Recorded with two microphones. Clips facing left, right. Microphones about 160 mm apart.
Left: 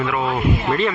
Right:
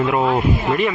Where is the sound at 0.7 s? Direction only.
15° right (ahead or behind).